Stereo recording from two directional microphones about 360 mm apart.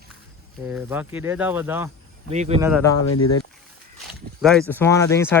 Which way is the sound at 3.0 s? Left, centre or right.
Left.